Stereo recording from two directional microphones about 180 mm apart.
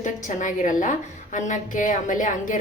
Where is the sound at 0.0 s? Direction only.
45° left (ahead or behind).